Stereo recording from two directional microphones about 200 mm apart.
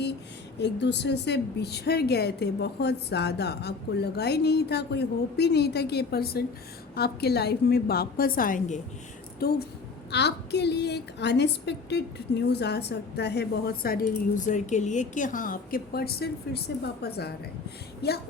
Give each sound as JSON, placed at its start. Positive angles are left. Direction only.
{"t": 0.6, "sound": "a woman's voice", "side_deg": 60}
{"t": 9.4, "sound": "a woman's voice", "side_deg": 50}
{"t": 14.4, "sound": "a woman's voice", "side_deg": 35}